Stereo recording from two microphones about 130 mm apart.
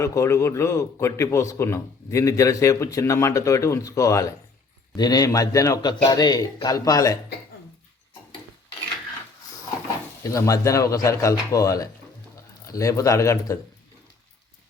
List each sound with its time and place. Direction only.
0.0 s a man's voice: 25° left (ahead or behind)
10.2 s a man's voice: 25° left (ahead or behind)